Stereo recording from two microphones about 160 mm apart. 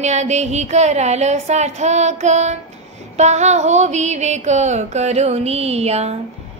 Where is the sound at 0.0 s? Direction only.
45° right (ahead or behind).